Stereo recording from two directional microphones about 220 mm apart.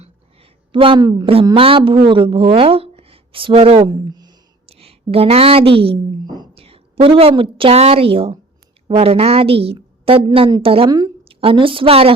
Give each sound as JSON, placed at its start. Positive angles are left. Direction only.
{"t": 0.7, "sound": "a woman's voice", "side_deg": -25}